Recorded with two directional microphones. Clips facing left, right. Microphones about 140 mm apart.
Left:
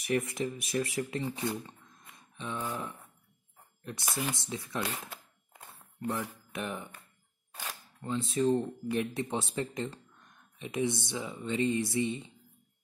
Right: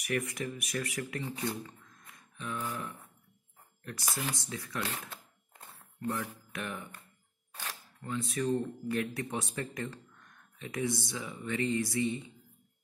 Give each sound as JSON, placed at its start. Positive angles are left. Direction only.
{"t": 0.0, "sound": "speech", "side_deg": 25}
{"t": 5.7, "sound": "a sound", "side_deg": 25}
{"t": 6.5, "sound": "speech", "side_deg": 20}
{"t": 7.5, "sound": "single-lens reflex camera", "side_deg": 20}
{"t": 8.8, "sound": "speech", "side_deg": 20}